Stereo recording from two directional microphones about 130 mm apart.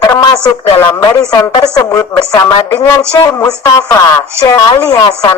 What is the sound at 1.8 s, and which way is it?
Speech, 20° left (ahead or behind).